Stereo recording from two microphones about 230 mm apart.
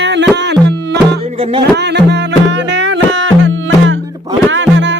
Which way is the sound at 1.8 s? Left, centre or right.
Right.